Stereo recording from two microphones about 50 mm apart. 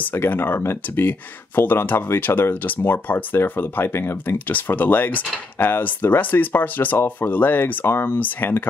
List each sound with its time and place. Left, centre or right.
0.4 s speech: left
4.5 s speech: left